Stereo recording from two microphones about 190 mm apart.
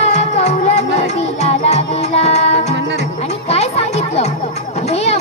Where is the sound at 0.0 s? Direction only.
35° left (ahead or behind).